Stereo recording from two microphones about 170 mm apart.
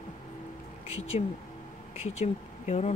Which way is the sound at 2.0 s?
40° left (ahead or behind).